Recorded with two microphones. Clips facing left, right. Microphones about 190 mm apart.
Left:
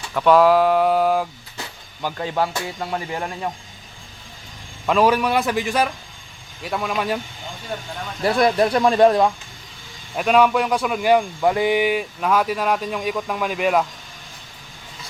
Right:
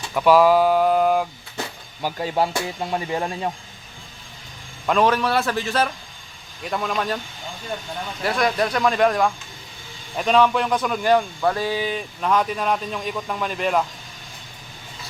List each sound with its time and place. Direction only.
0.1 s speech: 5° right (ahead or behind)
2.0 s speech: 10° right (ahead or behind)
4.9 s speech: 5° left (ahead or behind)
6.6 s speech: centre (ahead or behind)
8.4 s speech: 25° left (ahead or behind)
10.2 s speech: 10° left (ahead or behind)